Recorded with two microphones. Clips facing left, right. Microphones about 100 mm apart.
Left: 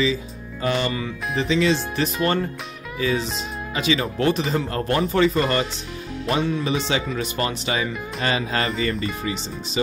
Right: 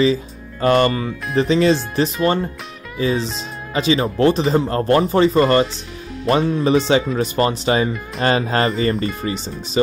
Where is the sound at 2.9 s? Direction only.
35° right (ahead or behind).